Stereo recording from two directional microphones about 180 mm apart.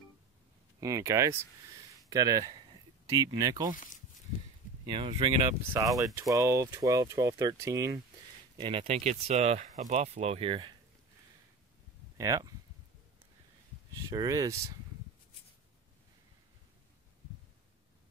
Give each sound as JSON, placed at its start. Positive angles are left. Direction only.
{"t": 0.7, "sound": "speech", "side_deg": -20}
{"t": 4.8, "sound": "speech", "side_deg": -25}
{"t": 8.5, "sound": "speech", "side_deg": -25}
{"t": 12.2, "sound": "speech", "side_deg": -20}
{"t": 14.1, "sound": "speech", "side_deg": -20}